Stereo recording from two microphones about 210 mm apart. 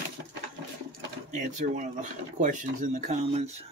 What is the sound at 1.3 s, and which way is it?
Speech, 35° right (ahead or behind).